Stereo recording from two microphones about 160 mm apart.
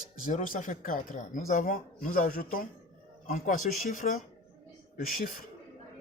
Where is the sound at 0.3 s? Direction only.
55° left (ahead or behind).